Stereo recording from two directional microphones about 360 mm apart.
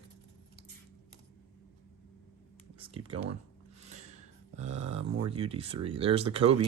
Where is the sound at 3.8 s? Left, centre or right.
Centre.